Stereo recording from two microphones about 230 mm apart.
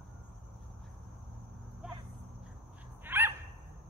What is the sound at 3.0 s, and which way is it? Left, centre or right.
Owl, centre.